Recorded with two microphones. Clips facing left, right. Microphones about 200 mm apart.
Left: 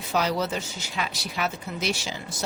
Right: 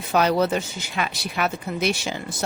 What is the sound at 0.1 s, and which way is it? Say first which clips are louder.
Speech: right 6 dB; 55° right (ahead or behind).